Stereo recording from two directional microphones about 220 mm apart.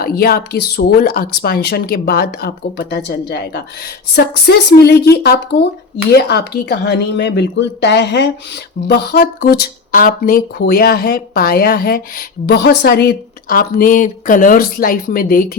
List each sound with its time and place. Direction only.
0.0 s a woman's voice: 45° left (ahead or behind)